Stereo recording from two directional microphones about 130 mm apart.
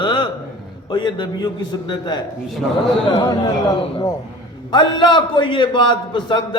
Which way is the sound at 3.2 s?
30° left (ahead or behind).